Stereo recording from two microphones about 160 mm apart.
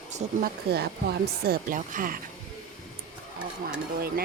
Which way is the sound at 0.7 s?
80° right.